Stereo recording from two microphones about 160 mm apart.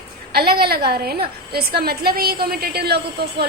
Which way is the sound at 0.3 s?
75° right (ahead or behind).